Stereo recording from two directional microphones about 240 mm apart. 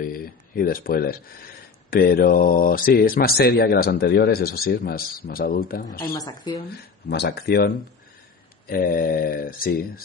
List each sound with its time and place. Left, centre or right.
0.0 s a sound: left
1.9 s speech: left
5.9 s speech: centre
7.1 s speech: left